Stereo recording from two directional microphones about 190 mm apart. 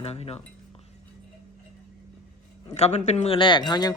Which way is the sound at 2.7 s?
35° left (ahead or behind).